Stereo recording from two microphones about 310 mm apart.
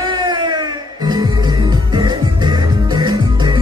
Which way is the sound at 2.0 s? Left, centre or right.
Centre.